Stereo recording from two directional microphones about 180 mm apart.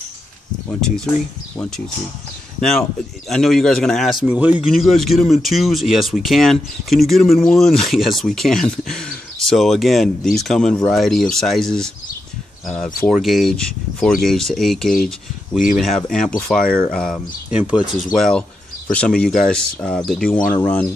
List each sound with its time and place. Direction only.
0.7 s speech: 5° left (ahead or behind)
3.3 s speech: centre (ahead or behind)